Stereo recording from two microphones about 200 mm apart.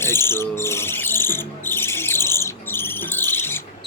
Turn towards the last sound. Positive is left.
turn(degrees=10)  # may be behind; listen again after turning